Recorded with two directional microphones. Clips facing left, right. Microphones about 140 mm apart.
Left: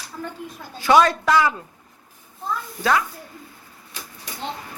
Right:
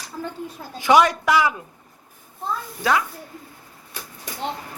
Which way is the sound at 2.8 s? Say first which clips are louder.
Left 1 dB; 15° right (ahead or behind).